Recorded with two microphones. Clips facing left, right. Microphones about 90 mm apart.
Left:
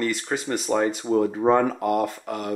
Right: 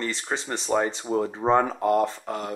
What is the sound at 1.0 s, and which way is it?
Speech, 5° right (ahead or behind).